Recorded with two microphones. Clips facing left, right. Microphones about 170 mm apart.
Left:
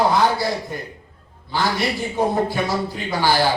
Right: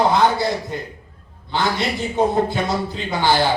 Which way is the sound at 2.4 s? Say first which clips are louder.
Even; 20° right (ahead or behind).